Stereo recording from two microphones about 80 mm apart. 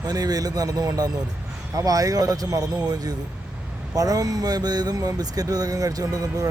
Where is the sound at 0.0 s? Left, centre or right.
Right.